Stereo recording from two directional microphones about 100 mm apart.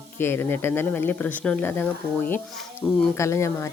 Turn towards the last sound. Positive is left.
turn(degrees=30)  # may be behind; listen again after turning